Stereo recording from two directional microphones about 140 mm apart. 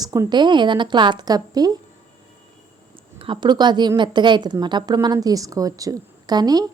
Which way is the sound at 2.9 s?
35° right (ahead or behind).